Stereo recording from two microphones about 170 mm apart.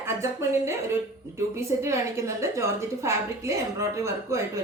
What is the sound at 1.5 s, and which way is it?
A woman's voice, 15° right (ahead or behind).